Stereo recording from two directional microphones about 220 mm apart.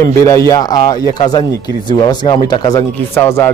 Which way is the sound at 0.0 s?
15° left (ahead or behind).